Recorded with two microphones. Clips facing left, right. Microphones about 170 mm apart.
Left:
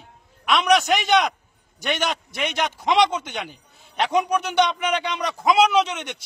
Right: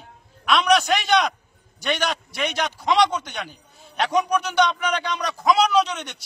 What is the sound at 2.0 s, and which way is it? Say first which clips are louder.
A man's voice: even; 20° left (ahead or behind).